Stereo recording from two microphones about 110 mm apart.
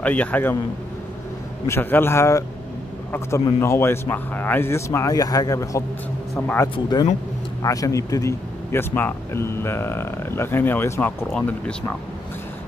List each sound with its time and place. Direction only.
0.0 s a man's voice: 15° left (ahead or behind)
1.7 s speech: 20° left (ahead or behind)
6.4 s speech: 20° left (ahead or behind)
7.6 s speech: 30° left (ahead or behind)
11.3 s a man's voice: 10° left (ahead or behind)